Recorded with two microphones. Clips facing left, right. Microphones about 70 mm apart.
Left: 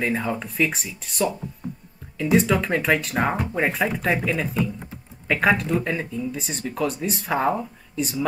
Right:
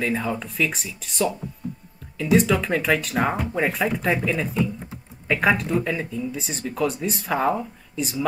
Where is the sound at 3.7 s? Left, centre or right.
Centre.